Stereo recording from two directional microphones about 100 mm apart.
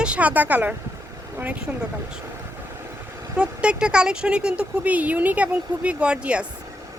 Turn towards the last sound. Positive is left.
turn(degrees=-10)  # may be behind; listen again after turning